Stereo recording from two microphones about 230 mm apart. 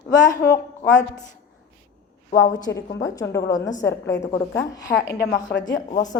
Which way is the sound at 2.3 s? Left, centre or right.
Centre.